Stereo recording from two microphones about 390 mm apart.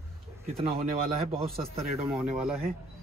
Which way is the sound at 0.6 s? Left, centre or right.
Centre.